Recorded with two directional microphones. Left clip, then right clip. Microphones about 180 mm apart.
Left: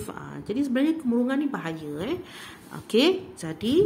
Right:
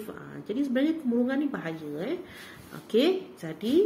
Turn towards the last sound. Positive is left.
turn(degrees=30)  # may be behind; listen again after turning